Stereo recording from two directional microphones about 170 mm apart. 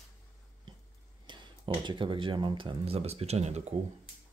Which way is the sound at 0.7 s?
25° right (ahead or behind).